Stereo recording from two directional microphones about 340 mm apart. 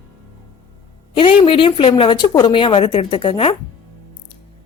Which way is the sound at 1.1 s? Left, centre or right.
Centre.